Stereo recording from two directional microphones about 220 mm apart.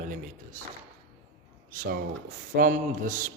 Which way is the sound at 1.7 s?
40° right (ahead or behind).